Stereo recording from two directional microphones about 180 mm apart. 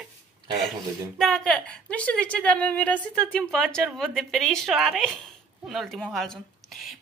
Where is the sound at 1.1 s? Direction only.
Centre (ahead or behind).